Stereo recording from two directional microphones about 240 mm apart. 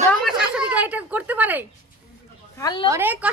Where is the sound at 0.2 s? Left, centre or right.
Centre.